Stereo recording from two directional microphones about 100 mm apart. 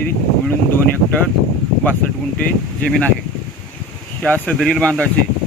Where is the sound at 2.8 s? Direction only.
10° left (ahead or behind).